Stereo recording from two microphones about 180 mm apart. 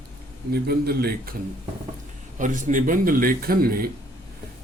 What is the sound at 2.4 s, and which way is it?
A man's voice, 45° right (ahead or behind).